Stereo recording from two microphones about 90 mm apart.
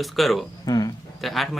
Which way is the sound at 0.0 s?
Centre (ahead or behind).